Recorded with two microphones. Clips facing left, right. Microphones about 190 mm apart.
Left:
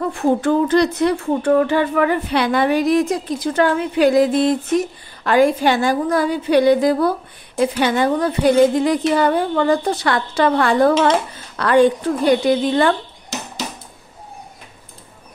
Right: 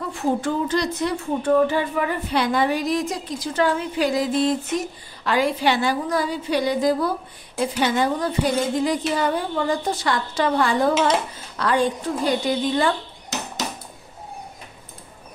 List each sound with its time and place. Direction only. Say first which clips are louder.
0.1 s speech: left 5 dB; 55° left (ahead or behind)